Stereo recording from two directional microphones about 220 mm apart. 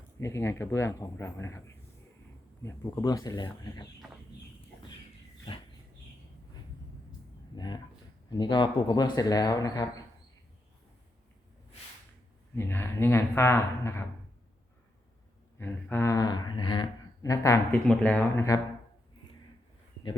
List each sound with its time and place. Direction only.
0.2 s speech: 15° left (ahead or behind)
7.5 s speech: 20° left (ahead or behind)
12.5 s speech: 10° left (ahead or behind)
15.5 s speech: 10° left (ahead or behind)